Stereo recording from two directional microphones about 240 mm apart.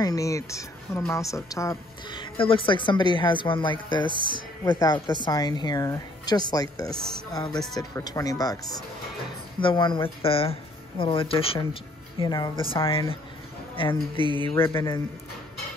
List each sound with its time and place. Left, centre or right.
0.0 s speech: centre
4.1 s speech: centre
4.6 s speech: centre
7.5 s speech: centre
7.9 s speech: centre
9.6 s speech: centre